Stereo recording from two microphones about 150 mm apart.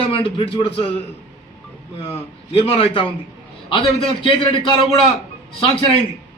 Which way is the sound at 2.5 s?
40° left (ahead or behind).